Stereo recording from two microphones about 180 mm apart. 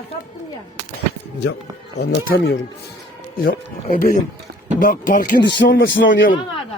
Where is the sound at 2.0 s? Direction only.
65° left (ahead or behind).